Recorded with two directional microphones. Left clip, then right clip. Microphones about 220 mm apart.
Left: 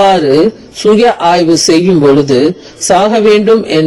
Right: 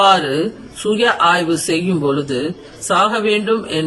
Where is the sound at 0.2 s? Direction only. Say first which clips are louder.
Left 11 dB; 25° left (ahead or behind).